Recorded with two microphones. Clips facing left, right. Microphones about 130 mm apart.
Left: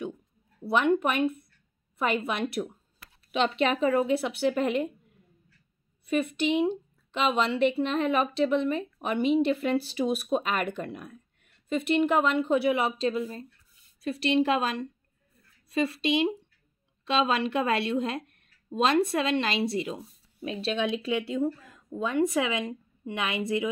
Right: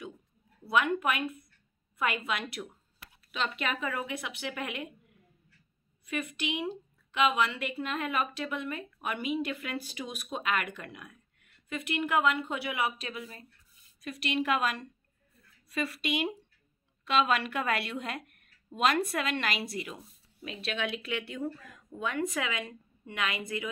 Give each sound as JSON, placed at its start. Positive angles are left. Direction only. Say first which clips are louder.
{"t": 0.7, "sound": "speech", "louder": "left 4 dB", "side_deg": 25}
{"t": 2.2, "sound": "a woman's voice", "louder": "left 6 dB", "side_deg": 30}
{"t": 6.6, "sound": "speech", "louder": "left 9 dB", "side_deg": 30}